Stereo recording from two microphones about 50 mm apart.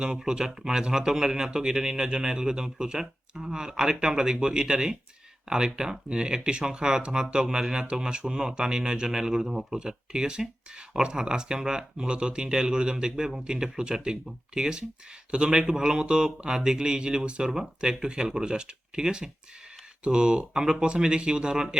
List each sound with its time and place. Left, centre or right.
0.2 s speech: centre